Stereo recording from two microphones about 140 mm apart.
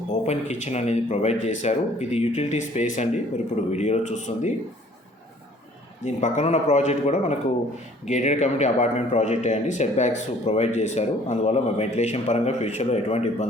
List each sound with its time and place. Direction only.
0.1 s speech: 55° left (ahead or behind)
6.1 s speech: 55° left (ahead or behind)